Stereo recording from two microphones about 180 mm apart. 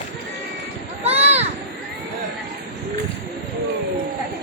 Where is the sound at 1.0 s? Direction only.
35° right (ahead or behind).